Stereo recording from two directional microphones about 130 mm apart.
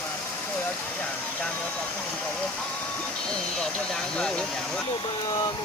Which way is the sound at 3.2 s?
5° left (ahead or behind).